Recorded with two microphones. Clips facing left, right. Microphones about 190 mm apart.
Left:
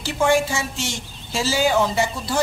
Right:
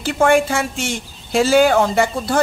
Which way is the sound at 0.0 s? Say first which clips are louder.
Right 4 dB; 55° right (ahead or behind).